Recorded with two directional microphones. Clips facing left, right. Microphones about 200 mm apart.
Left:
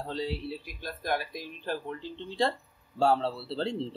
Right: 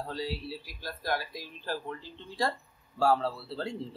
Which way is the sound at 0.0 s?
25° left (ahead or behind).